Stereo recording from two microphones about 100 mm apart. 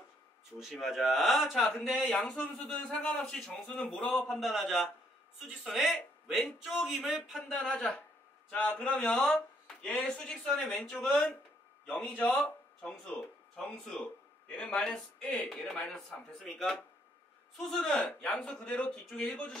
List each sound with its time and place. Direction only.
0.6 s speech: 5° right (ahead or behind)
1.6 s speech: 15° left (ahead or behind)
2.1 s speech: centre (ahead or behind)
2.7 s speech: 10° left (ahead or behind)
7.5 s speech: 10° left (ahead or behind)